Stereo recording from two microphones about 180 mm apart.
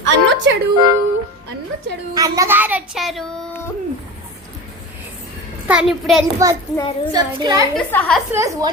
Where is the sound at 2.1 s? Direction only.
20° right (ahead or behind); by 3.5 s centre (ahead or behind).